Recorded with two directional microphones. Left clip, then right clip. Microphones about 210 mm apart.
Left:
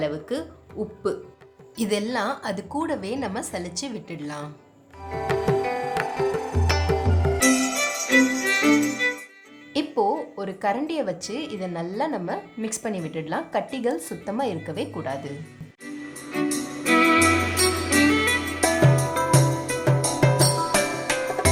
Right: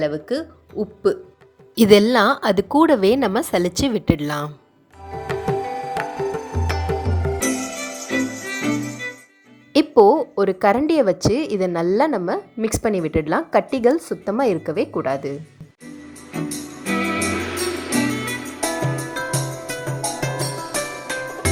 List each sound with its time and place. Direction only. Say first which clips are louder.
0.0 s a woman's voice: right 5 dB; 30° right (ahead or behind)
5.0 s music: even; centre (ahead or behind)
9.7 s a woman's voice: right 10 dB; 35° right (ahead or behind)
15.9 s music: left 2 dB; centre (ahead or behind)